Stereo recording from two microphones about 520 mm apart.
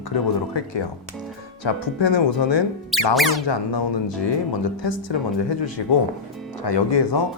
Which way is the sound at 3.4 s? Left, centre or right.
Left.